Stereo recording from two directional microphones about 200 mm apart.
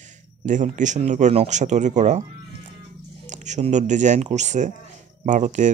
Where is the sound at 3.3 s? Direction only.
35° right (ahead or behind).